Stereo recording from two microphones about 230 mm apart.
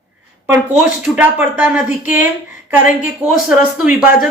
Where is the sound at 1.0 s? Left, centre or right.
Centre.